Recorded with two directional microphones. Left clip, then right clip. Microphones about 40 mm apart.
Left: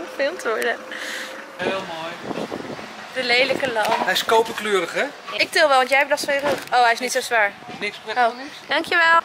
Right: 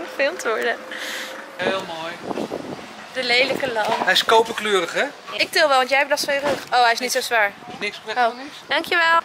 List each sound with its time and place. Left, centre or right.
0.2 s speech: centre
3.2 s speech: centre
4.1 s speech: right
5.3 s speech: centre